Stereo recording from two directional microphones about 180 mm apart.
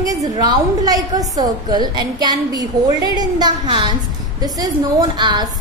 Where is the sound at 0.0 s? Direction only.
20° right (ahead or behind).